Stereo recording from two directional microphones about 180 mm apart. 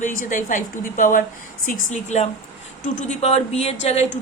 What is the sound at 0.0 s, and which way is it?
A woman's voice, 45° left (ahead or behind).